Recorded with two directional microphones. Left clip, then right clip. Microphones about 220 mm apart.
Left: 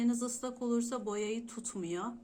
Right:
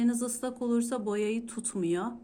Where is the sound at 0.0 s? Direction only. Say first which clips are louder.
Right 4 dB; 40° right (ahead or behind).